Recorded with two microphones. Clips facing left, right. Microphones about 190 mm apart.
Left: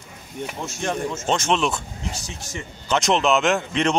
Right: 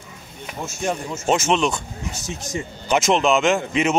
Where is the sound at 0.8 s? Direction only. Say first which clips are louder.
Right 2 dB; 10° right (ahead or behind).